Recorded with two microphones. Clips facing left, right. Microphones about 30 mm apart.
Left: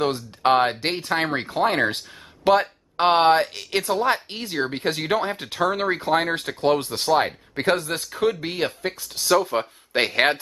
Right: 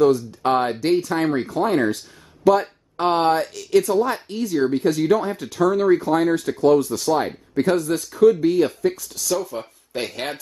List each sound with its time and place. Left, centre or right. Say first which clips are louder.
0.0 s speech: right 5 dB; left